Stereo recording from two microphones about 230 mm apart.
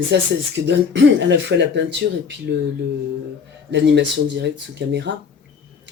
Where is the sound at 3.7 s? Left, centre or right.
Right.